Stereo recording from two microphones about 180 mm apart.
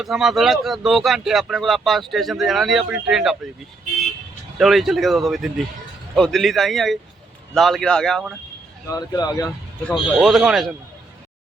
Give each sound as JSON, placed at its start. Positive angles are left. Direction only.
{"t": 0.0, "sound": "speech", "side_deg": 0}
{"t": 4.5, "sound": "speech", "side_deg": 0}
{"t": 8.9, "sound": "speech", "side_deg": 20}
{"t": 9.8, "sound": "speech", "side_deg": 0}